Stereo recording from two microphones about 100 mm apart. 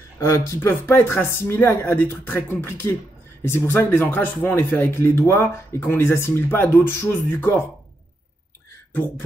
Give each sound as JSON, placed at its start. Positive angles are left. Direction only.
{"t": 0.2, "sound": "speech", "side_deg": 25}
{"t": 3.4, "sound": "speech", "side_deg": 20}